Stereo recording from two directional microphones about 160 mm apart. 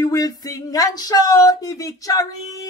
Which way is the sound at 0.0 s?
20° left (ahead or behind).